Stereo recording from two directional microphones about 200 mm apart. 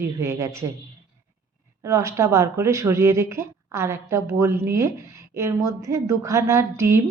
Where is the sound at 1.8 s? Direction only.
15° right (ahead or behind).